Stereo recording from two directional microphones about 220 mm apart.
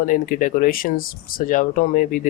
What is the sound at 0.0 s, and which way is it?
Speech, 40° left (ahead or behind).